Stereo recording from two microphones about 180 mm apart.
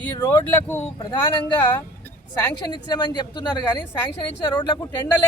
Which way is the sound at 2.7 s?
25° left (ahead or behind).